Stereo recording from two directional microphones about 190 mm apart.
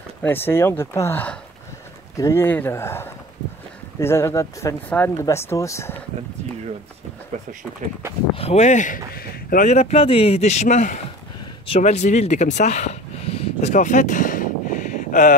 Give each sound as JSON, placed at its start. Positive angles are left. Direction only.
{"t": 0.2, "sound": "speech", "side_deg": 10}
{"t": 8.4, "sound": "speech", "side_deg": 35}
{"t": 11.6, "sound": "a sound", "side_deg": 35}